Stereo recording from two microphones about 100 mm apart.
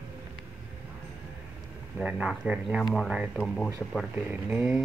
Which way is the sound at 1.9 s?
10° right (ahead or behind).